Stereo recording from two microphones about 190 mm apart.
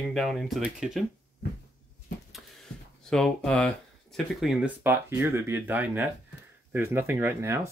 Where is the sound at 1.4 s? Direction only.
55° left (ahead or behind).